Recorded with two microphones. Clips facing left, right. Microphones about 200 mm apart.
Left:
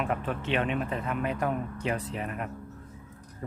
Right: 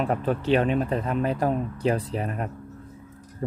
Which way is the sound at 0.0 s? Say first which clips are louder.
Right 6 dB; 35° right (ahead or behind).